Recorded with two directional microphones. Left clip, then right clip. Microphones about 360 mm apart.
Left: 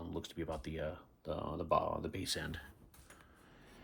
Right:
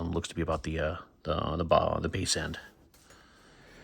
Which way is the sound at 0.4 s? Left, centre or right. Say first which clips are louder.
Right 10 dB; right.